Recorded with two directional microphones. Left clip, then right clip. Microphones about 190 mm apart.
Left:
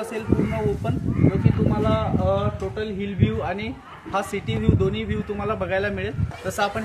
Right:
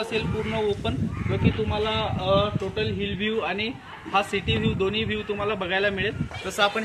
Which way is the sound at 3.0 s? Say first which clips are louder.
Even; 50° left (ahead or behind).